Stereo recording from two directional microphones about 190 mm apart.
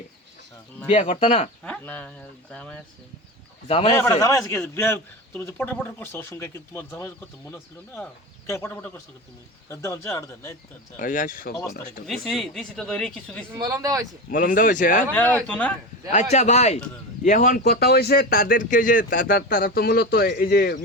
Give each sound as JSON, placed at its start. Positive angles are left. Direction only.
{"t": 0.9, "sound": "speech", "side_deg": 25}
{"t": 1.6, "sound": "a man's voice", "side_deg": 10}
{"t": 3.7, "sound": "speech", "side_deg": 35}
{"t": 4.2, "sound": "a man's voice", "side_deg": 15}
{"t": 8.4, "sound": "a man's voice", "side_deg": 15}
{"t": 10.9, "sound": "speech", "side_deg": 45}
{"t": 12.0, "sound": "speech", "side_deg": 0}
{"t": 13.5, "sound": "speech", "side_deg": -15}
{"t": 14.3, "sound": "speech", "side_deg": 45}
{"t": 15.1, "sound": "a man's voice", "side_deg": 10}
{"t": 16.3, "sound": "speech", "side_deg": 35}